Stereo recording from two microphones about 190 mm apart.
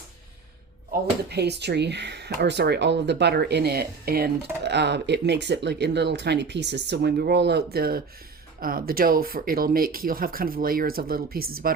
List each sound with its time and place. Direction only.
1.3 s speech: 60° right (ahead or behind)